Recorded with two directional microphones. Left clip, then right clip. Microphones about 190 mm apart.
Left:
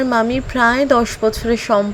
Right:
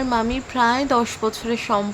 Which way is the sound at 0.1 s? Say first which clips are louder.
Left 5 dB; 25° left (ahead or behind).